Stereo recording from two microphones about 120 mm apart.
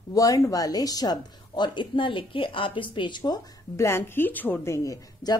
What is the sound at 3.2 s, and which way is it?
Speech, 25° left (ahead or behind).